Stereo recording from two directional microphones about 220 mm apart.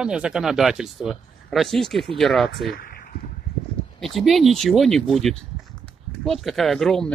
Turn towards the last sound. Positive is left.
turn(degrees=0)  # may be behind; listen again after turning